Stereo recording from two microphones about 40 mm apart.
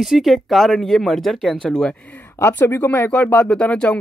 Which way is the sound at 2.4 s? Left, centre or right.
Left.